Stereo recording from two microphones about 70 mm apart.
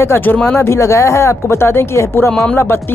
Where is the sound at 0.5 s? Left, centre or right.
Left.